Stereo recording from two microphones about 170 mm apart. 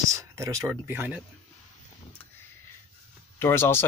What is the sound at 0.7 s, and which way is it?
Speech, 10° right (ahead or behind).